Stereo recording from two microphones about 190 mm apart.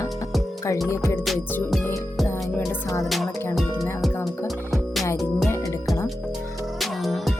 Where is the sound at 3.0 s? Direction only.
Centre (ahead or behind).